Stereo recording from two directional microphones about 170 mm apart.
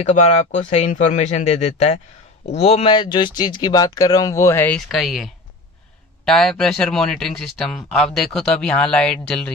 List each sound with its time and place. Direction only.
0.1 s speech: 40° left (ahead or behind); by 9.5 s 5° left (ahead or behind)